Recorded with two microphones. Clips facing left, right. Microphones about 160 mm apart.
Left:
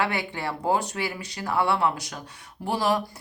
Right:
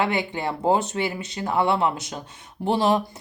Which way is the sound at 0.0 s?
20° right (ahead or behind).